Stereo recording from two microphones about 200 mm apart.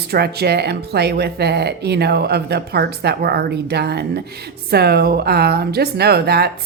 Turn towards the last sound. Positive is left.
turn(degrees=-55)  # may be behind; listen again after turning